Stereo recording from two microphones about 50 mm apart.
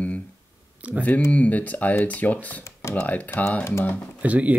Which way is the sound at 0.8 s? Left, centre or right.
Right.